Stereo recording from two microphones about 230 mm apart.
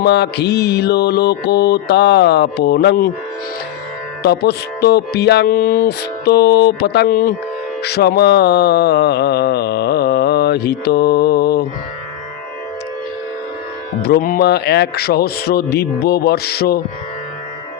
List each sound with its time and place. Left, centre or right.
0.0 s music: left
4.2 s music: left
14.0 s music: left